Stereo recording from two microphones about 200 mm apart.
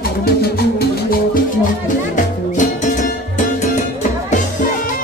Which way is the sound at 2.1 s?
40° left (ahead or behind).